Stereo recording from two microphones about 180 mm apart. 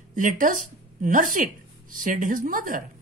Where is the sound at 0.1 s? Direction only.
45° right (ahead or behind).